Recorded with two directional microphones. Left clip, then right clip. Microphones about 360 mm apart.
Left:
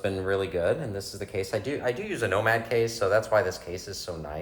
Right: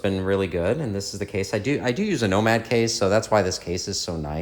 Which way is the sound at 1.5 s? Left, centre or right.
Centre.